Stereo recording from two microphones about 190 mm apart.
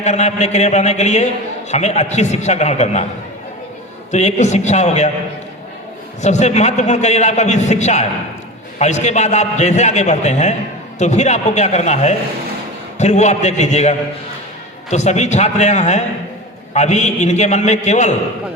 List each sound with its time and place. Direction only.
0.0 s a man's voice: 35° left (ahead or behind)
4.1 s a man's voice: 40° left (ahead or behind)
6.2 s a man's voice: 35° left (ahead or behind)